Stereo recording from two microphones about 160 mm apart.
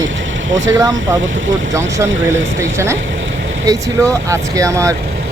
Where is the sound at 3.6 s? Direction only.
20° right (ahead or behind).